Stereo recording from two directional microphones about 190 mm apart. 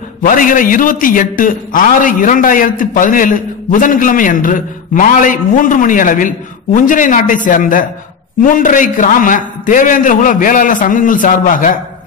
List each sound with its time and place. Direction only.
0.2 s a man's voice: 45° left (ahead or behind)